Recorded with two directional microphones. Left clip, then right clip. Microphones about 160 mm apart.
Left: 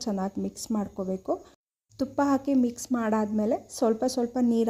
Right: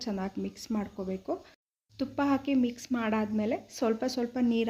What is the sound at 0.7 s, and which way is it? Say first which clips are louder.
Speech: left 4 dB; 25° left (ahead or behind).